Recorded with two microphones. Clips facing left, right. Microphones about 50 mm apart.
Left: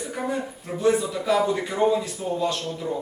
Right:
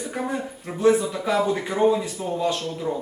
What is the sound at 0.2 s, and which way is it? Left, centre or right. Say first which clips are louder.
A man's voice: even; centre.